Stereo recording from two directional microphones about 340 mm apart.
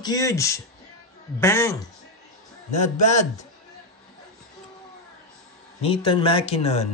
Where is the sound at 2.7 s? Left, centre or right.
Left.